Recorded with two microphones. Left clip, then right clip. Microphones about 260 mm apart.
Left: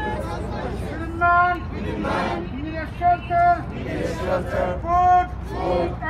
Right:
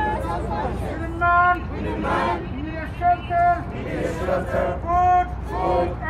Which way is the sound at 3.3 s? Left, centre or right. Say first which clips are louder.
Left 1 dB; centre.